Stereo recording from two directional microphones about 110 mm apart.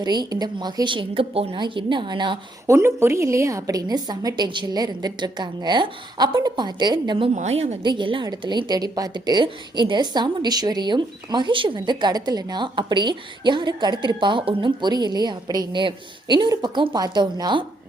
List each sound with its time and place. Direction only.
0.0 s a woman's voice: 40° right (ahead or behind); by 1.5 s 60° right (ahead or behind)
1.5 s a woman's voice: 45° right (ahead or behind)
2.6 s a woman's voice: 25° right (ahead or behind); by 7.3 s 40° right (ahead or behind)
7.3 s a woman's voice: 80° right
7.9 s a woman's voice: 45° right (ahead or behind)